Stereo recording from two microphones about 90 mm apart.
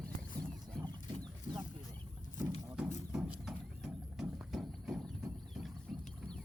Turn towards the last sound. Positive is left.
turn(degrees=-5)  # may be behind; listen again after turning